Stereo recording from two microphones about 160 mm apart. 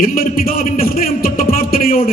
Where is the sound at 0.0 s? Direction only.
65° left (ahead or behind).